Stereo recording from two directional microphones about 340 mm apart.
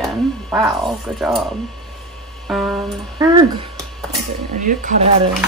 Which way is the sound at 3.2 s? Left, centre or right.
Centre.